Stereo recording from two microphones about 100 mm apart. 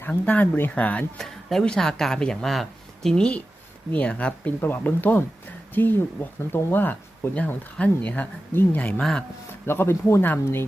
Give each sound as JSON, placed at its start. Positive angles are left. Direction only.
{"t": 0.0, "sound": "speech", "side_deg": 20}
{"t": 1.2, "sound": "speech", "side_deg": 5}
{"t": 9.0, "sound": "speech", "side_deg": 10}
{"t": 9.6, "sound": "speech", "side_deg": 25}